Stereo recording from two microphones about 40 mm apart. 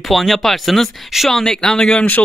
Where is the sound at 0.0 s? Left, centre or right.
Centre.